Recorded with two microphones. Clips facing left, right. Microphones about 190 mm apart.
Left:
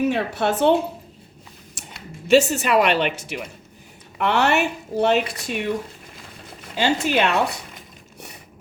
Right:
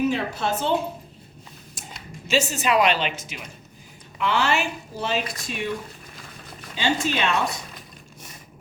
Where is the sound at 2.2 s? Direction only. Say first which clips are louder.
Left 7 dB; 65° left (ahead or behind).